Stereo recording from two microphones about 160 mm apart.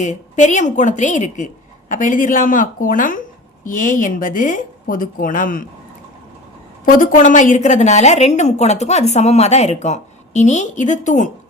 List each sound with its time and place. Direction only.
0.0 s a woman's voice: 50° left (ahead or behind)
6.8 s a woman's voice: 60° left (ahead or behind)